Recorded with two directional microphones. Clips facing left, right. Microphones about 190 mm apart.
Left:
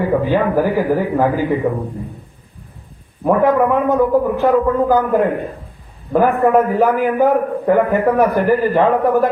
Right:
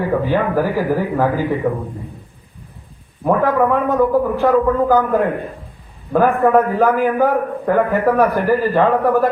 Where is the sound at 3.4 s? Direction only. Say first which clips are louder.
Left 3 dB; 15° left (ahead or behind).